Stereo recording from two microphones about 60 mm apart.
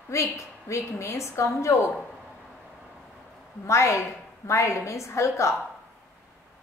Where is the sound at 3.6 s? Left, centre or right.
Left.